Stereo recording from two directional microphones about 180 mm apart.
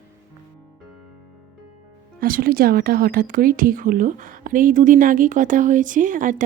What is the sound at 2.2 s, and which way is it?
Speech, 55° right (ahead or behind).